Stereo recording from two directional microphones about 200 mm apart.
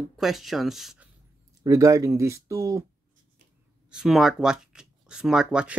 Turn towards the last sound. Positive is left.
turn(degrees=-5)  # may be behind; listen again after turning